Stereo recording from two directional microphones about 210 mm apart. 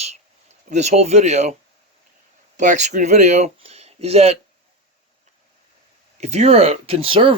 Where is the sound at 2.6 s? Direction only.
35° right (ahead or behind).